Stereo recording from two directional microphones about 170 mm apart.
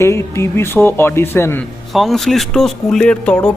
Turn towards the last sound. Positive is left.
turn(degrees=5)  # may be behind; listen again after turning